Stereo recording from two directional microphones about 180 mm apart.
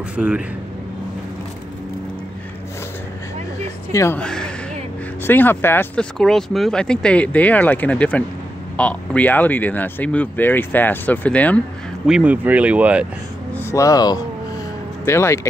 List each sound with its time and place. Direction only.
0.1 s speech: 5° right (ahead or behind)
3.9 s speech: 15° left (ahead or behind)
4.2 s speech: 5° left (ahead or behind)
12.1 s speech: 10° right (ahead or behind)
13.6 s speech: 15° left (ahead or behind)